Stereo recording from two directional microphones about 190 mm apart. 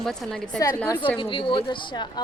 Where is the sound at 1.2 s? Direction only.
25° left (ahead or behind).